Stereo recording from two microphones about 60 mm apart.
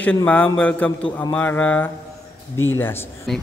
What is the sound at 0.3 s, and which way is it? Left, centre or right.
A man's voice, left.